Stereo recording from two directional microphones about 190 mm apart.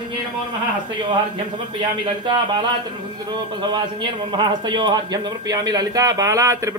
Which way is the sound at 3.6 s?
25° right (ahead or behind).